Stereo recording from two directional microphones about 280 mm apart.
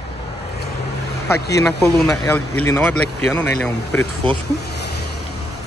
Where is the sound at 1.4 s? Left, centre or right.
Left.